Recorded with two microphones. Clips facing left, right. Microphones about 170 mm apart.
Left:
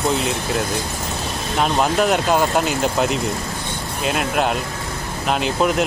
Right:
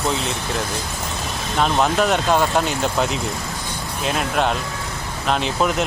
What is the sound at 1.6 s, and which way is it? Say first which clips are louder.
Speech: even; 5° left (ahead or behind).